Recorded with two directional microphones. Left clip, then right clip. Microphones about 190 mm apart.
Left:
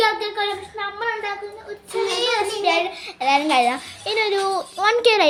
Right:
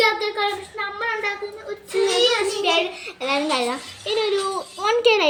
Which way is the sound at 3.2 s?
35° left (ahead or behind).